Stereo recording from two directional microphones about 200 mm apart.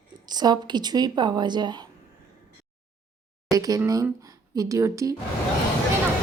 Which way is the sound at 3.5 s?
15° right (ahead or behind).